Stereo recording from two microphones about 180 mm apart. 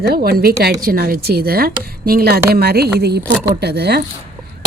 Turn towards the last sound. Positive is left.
turn(degrees=-65)  # may be behind; listen again after turning